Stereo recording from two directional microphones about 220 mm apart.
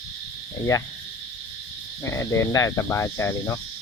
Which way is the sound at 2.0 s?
15° left (ahead or behind).